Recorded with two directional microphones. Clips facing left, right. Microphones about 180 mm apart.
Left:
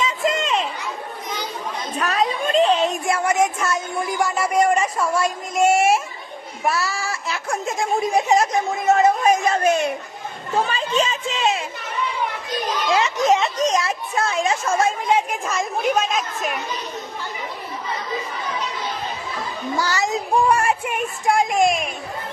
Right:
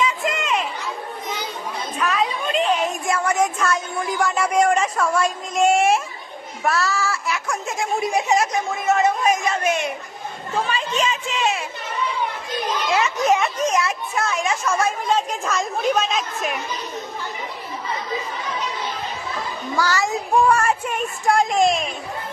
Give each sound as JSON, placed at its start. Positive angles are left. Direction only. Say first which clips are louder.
{"t": 0.0, "sound": "children playing", "louder": "left 1 dB", "side_deg": 25}
{"t": 2.0, "sound": "chatter", "louder": "left 1 dB", "side_deg": 40}
{"t": 2.7, "sound": "child singing", "louder": "left 2 dB", "side_deg": 25}
{"t": 4.2, "sound": "speech", "louder": "even", "side_deg": 0}
{"t": 6.7, "sound": "a child's voice", "louder": "right 2 dB", "side_deg": 15}
{"t": 7.3, "sound": "a sound", "louder": "left 1 dB", "side_deg": 30}
{"t": 7.8, "sound": "speech", "louder": "left 2 dB", "side_deg": 45}
{"t": 8.7, "sound": "speech", "louder": "left 3 dB", "side_deg": 30}
{"t": 12.9, "sound": "speech", "louder": "left 1 dB", "side_deg": 25}
{"t": 13.8, "sound": "a woman's voice", "louder": "left 1 dB", "side_deg": 30}
{"t": 19.8, "sound": "a child's voice", "louder": "right 2 dB", "side_deg": 20}